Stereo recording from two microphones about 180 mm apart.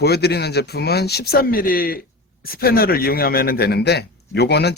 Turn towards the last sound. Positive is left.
turn(degrees=65)  # may be behind; listen again after turning